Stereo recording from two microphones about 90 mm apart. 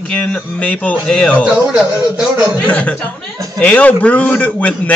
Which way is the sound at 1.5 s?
5° right (ahead or behind).